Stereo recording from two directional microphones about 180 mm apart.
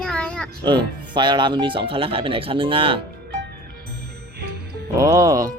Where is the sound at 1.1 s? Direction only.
25° right (ahead or behind).